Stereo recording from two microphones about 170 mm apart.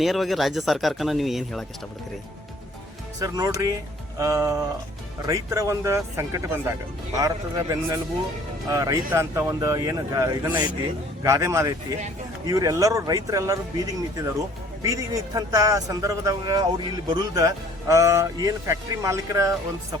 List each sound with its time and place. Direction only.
0.0 s speech: centre (ahead or behind)
3.2 s speech: 20° right (ahead or behind)